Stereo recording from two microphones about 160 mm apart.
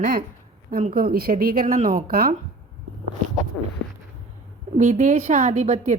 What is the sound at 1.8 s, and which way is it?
Speech, 30° right (ahead or behind).